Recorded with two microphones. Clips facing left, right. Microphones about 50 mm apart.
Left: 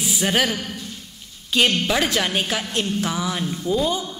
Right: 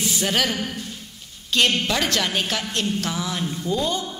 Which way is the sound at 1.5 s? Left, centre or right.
Centre.